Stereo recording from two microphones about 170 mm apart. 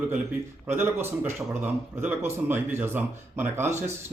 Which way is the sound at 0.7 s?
15° right (ahead or behind).